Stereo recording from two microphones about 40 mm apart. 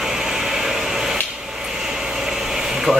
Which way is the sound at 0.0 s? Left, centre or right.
Centre.